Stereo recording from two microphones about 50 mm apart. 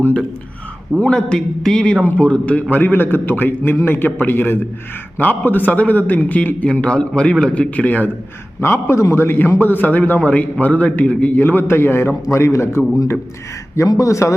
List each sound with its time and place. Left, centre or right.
0.9 s a man's voice: centre
2.6 s a man's voice: left
6.8 s a man's voice: left
7.8 s a man's voice: left
8.6 s a man's voice: left
9.1 s a man's voice: left
13.7 s speech: left